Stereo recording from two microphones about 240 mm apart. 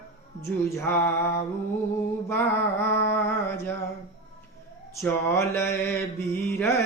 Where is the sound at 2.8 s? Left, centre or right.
Centre.